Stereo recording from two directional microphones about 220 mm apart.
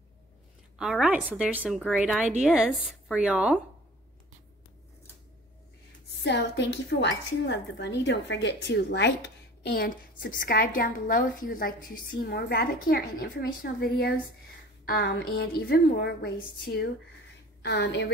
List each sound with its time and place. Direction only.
0.7 s a woman's voice: centre (ahead or behind)
6.2 s speech: 50° left (ahead or behind)
17.6 s a woman's voice: 55° left (ahead or behind)